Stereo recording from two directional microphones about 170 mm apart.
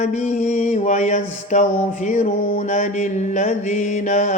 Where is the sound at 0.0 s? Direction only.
45° left (ahead or behind).